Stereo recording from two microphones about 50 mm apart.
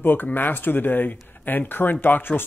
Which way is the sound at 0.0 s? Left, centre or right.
Left.